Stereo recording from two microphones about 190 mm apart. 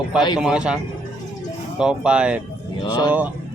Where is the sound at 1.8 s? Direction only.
5° right (ahead or behind).